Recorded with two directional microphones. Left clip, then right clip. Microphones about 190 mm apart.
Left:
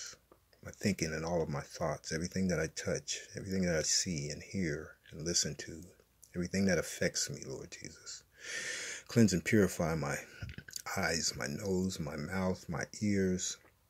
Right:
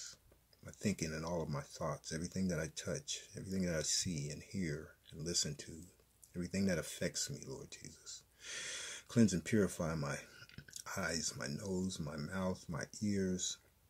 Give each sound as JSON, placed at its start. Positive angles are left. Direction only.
{"t": 0.7, "sound": "speech", "side_deg": 15}